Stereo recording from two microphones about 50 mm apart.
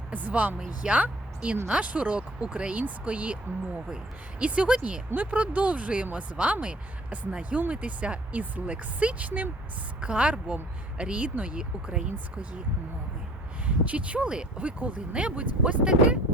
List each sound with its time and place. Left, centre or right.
0.1 s a woman's voice: right
5.1 s speech: right
13.7 s speech: right